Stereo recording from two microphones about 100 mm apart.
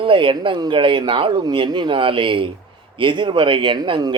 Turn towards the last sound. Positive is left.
turn(degrees=-45)  # may be behind; listen again after turning